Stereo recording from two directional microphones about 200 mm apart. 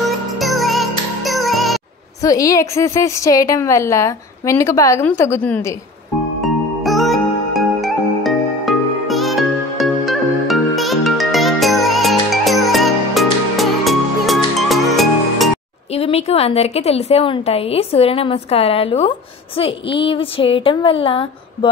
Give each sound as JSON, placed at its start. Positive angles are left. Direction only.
{"t": 0.4, "sound": "music", "side_deg": 0}
{"t": 2.2, "sound": "a woman's voice", "side_deg": 15}
{"t": 6.4, "sound": "music", "side_deg": 0}
{"t": 15.9, "sound": "a woman's voice", "side_deg": 30}